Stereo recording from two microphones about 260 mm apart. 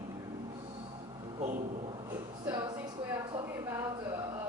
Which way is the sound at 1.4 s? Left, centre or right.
Right.